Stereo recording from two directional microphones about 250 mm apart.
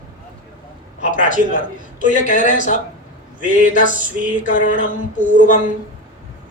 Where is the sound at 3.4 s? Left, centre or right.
Right.